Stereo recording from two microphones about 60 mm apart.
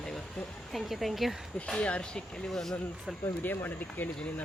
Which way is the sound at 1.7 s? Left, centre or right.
Centre.